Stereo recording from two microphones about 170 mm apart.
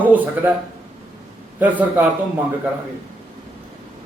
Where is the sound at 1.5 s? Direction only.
10° right (ahead or behind).